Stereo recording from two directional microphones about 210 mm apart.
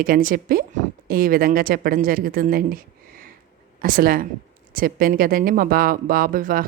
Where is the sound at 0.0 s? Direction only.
45° right (ahead or behind).